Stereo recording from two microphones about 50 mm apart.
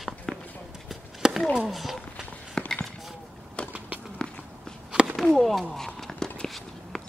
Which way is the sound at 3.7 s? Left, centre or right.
Right.